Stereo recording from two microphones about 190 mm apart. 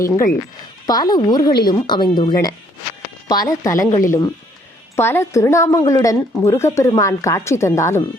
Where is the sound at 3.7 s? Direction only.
45° left (ahead or behind).